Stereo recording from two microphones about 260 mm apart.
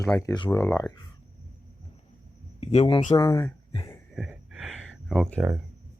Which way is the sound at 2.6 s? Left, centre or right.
Left.